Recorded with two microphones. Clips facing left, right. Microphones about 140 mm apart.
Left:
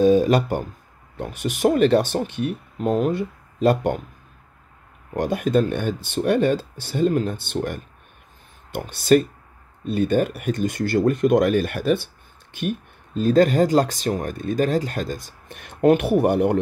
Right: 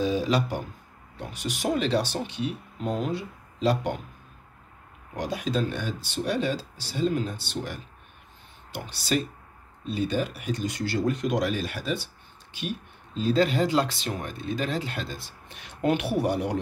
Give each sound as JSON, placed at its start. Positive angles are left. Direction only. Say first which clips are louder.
{"t": 0.0, "sound": "speech", "louder": "left 9 dB", "side_deg": 50}
{"t": 5.1, "sound": "speech", "louder": "left 8 dB", "side_deg": 50}